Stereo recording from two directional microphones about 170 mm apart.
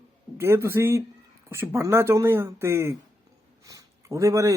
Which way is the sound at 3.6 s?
20° right (ahead or behind).